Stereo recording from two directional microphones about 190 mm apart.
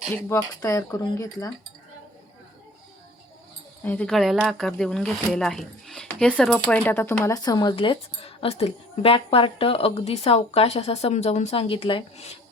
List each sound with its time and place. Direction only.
0.1 s speech: 15° left (ahead or behind)
3.8 s speech: 5° left (ahead or behind); by 12.3 s 30° left (ahead or behind)